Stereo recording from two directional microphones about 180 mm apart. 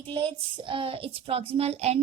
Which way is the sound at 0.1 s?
30° right (ahead or behind).